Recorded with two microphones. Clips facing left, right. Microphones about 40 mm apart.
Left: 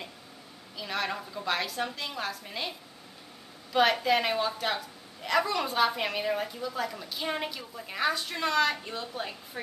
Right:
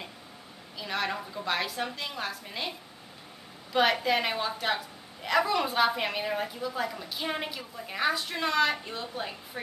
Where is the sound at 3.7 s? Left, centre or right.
Centre.